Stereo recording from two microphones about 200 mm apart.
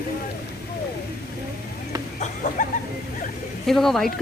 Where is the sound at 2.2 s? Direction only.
40° left (ahead or behind).